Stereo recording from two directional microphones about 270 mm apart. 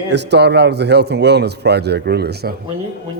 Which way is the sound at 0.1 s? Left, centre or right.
Right.